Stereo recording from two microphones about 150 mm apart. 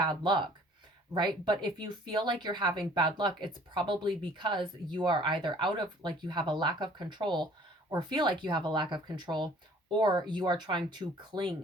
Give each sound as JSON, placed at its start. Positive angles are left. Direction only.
{"t": 0.0, "sound": "speech", "side_deg": -30}
{"t": 1.5, "sound": "speech", "side_deg": -30}